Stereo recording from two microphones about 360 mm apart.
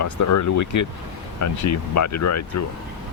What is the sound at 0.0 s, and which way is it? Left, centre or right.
Speech, left.